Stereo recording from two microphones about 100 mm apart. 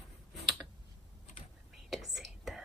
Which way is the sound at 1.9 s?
Centre (ahead or behind).